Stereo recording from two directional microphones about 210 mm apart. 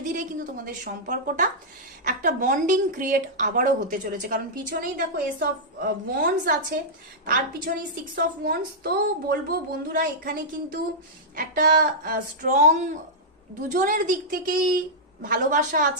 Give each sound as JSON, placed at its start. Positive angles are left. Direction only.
{"t": 0.0, "sound": "a woman's voice", "side_deg": -40}